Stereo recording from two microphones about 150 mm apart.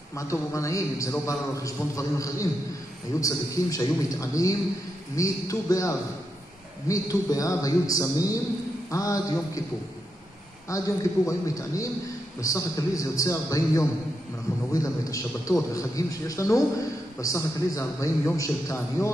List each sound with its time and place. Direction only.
0.1 s a man's voice: 20° left (ahead or behind)
10.7 s a man's voice: 20° left (ahead or behind)